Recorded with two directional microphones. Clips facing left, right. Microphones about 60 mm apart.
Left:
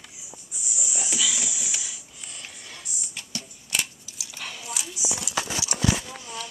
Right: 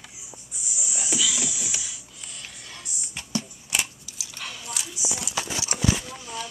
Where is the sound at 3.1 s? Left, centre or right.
Right.